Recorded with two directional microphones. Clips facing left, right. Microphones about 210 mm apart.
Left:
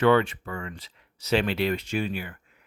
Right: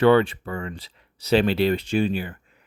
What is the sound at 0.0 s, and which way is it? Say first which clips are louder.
Speech: right 4 dB; 35° right (ahead or behind).